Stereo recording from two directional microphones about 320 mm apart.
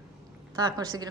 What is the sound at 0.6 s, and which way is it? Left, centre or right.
Speech, centre.